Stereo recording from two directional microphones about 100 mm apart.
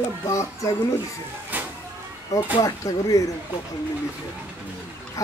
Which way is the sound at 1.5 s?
15° right (ahead or behind).